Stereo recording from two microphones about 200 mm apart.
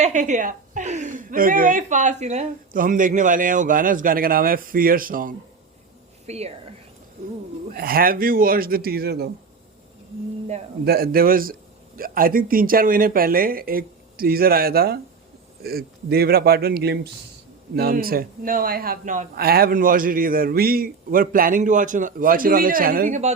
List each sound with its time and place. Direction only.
0.0 s a woman's voice: 40° right (ahead or behind)
6.2 s speech: 30° right (ahead or behind)
7.8 s a man's voice: 45° right (ahead or behind)
10.8 s a man's voice: 50° right (ahead or behind)